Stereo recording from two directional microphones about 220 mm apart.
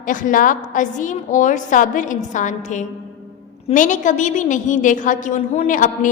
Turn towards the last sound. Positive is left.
turn(degrees=35)  # may be behind; listen again after turning